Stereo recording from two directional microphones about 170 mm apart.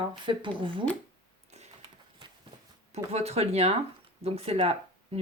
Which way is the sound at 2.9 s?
40° right (ahead or behind).